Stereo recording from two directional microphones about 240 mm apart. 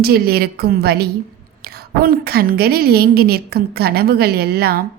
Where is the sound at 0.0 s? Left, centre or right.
Right.